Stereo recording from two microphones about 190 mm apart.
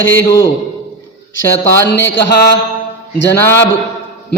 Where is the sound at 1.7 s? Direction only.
10° left (ahead or behind).